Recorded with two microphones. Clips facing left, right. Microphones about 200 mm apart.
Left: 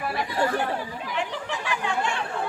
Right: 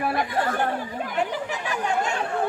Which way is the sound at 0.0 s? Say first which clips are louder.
Right 1 dB; 55° right (ahead or behind).